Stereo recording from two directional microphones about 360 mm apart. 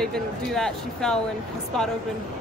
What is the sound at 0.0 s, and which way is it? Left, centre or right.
Speech, centre.